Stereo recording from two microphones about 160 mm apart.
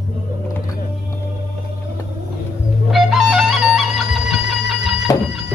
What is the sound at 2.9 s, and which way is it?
Music, centre (ahead or behind).